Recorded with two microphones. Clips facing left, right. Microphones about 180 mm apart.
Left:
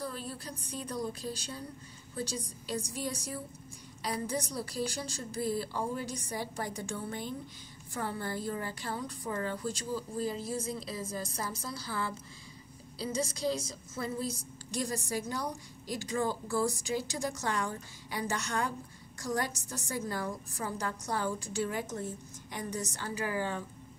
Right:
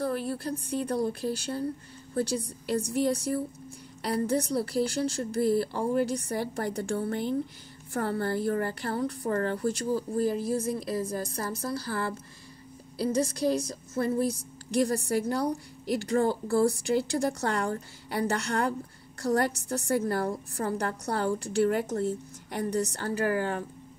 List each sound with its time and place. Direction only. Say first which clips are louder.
0.0 s a woman's voice: right 10 dB; 65° right (ahead or behind)